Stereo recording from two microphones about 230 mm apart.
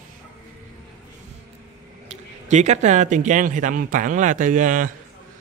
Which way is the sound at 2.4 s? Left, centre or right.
Right.